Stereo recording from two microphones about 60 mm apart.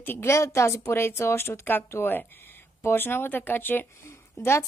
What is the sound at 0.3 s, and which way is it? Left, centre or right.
Speech, left.